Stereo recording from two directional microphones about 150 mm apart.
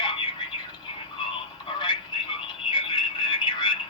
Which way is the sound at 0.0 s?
35° left (ahead or behind).